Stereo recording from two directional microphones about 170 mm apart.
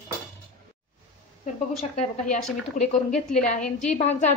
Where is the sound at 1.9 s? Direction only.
40° left (ahead or behind).